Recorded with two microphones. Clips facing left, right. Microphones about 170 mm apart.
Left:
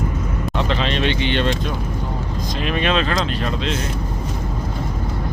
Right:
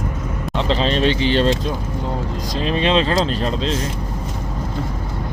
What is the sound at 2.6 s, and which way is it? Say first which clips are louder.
Speech: right 3 dB; 30° right (ahead or behind).